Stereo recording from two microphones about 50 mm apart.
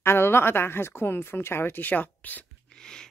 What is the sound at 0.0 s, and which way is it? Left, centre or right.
Speech, left.